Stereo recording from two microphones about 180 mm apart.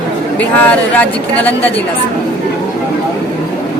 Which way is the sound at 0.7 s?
10° left (ahead or behind).